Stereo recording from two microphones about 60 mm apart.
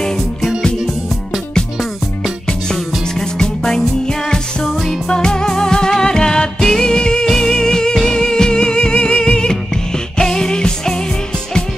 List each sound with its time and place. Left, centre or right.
0.0 s music: centre
3.2 s music: centre